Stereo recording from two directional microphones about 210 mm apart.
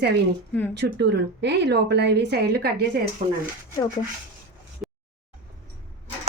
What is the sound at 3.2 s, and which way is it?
Speech, 35° right (ahead or behind).